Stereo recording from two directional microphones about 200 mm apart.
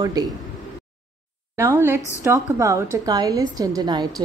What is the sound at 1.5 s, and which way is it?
A woman's voice, 10° right (ahead or behind).